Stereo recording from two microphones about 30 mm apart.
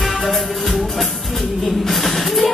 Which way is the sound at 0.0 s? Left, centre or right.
Centre.